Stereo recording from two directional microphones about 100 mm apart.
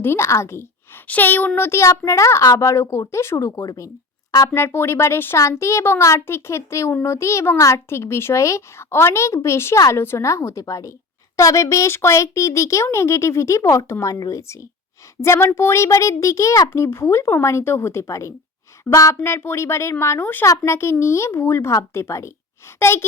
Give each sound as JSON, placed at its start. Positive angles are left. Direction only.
{"t": 0.0, "sound": "a child's voice", "side_deg": 25}
{"t": 1.0, "sound": "a child's voice", "side_deg": 15}